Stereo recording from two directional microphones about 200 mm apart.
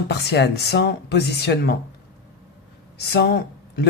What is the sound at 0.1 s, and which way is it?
Speech, 55° left (ahead or behind).